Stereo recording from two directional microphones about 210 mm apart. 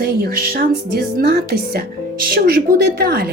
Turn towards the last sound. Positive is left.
turn(degrees=-45)  # may be behind; listen again after turning